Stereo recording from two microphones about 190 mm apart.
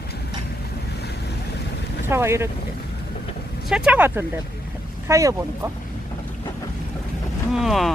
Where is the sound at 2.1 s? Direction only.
15° right (ahead or behind).